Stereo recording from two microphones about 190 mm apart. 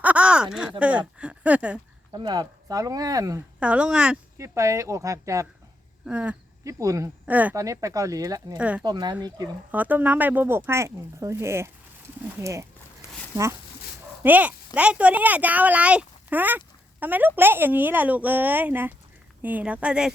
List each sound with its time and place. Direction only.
0.0 s a sound: 5° right (ahead or behind)
0.8 s speech: 5° right (ahead or behind)
2.1 s speech: 20° right (ahead or behind)
3.6 s speech: 5° right (ahead or behind)
4.4 s speech: 15° right (ahead or behind)
8.5 s speech: 5° right (ahead or behind)
8.8 s speech: 20° right (ahead or behind)
9.7 s speech: 10° right (ahead or behind)